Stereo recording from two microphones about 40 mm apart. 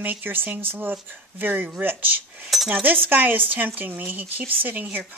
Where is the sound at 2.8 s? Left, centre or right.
Right.